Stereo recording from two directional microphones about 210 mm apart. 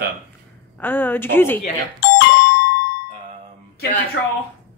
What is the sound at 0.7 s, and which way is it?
Speech, 10° left (ahead or behind).